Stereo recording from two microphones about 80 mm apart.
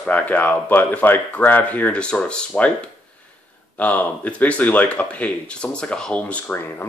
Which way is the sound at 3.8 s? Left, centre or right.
Centre.